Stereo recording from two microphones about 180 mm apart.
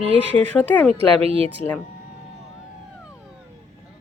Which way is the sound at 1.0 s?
35° right (ahead or behind).